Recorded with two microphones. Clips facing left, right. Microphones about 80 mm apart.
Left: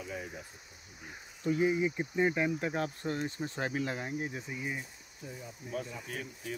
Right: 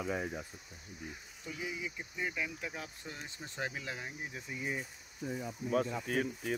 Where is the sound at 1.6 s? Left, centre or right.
Left.